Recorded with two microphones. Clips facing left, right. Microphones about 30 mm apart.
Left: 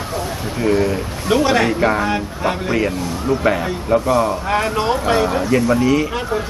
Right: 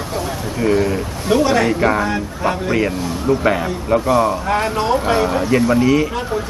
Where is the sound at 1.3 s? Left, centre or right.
Centre.